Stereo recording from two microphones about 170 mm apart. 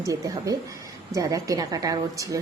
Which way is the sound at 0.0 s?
20° right (ahead or behind).